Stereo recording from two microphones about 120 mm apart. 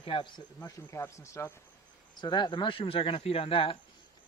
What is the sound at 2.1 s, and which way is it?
Speech, 40° left (ahead or behind).